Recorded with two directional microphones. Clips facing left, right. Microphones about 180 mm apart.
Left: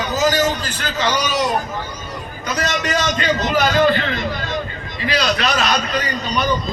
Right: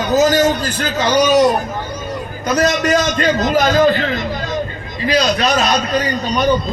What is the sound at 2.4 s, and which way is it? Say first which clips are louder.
A man's voice: right 7 dB; 40° right (ahead or behind).